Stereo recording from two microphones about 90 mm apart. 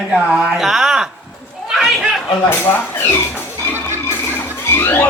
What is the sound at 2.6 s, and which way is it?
Speech, 25° left (ahead or behind).